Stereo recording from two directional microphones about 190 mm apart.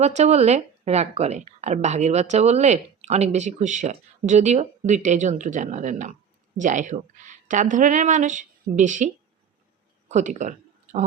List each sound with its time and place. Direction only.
0.0 s a woman's voice: 35° right (ahead or behind)
10.1 s a woman's voice: 40° right (ahead or behind)